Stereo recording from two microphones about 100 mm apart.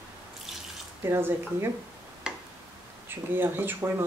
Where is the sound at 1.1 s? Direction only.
25° right (ahead or behind).